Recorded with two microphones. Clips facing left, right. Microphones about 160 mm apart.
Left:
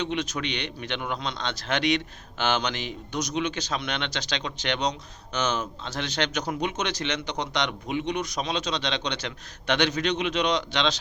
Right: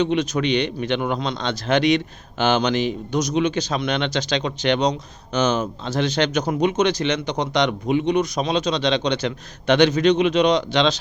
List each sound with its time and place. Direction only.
0.0 s speech: 40° right (ahead or behind)